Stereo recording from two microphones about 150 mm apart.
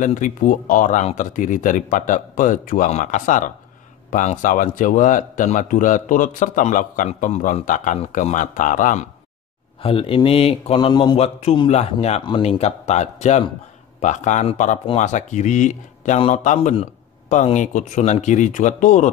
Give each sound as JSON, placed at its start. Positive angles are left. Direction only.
{"t": 0.0, "sound": "a man's voice", "side_deg": 60}
{"t": 9.8, "sound": "a man's voice", "side_deg": 35}
{"t": 11.1, "sound": "a man's voice", "side_deg": 40}